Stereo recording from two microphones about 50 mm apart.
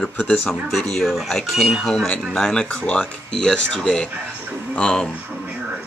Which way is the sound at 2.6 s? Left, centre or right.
Left.